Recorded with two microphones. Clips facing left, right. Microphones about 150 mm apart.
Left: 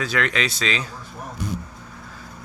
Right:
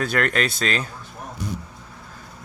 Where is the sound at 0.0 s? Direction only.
50° right (ahead or behind).